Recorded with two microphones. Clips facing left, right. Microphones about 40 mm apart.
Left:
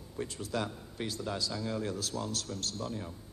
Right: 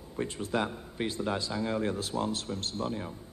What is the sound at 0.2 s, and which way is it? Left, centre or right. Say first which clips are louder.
A man's voice: right 4 dB; right.